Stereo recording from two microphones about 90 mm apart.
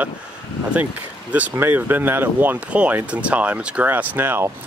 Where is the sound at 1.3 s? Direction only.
20° right (ahead or behind).